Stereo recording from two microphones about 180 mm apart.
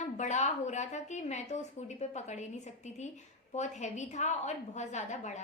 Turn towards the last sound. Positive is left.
turn(degrees=40)  # may be behind; listen again after turning